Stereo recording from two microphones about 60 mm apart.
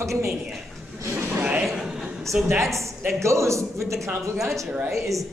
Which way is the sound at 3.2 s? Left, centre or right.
Right.